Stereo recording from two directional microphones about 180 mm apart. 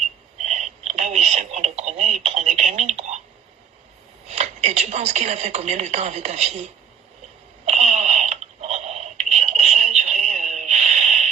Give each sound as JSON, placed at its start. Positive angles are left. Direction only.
{"t": 0.3, "sound": "speech", "side_deg": -40}
{"t": 4.3, "sound": "speech", "side_deg": -40}
{"t": 7.6, "sound": "radio", "side_deg": -40}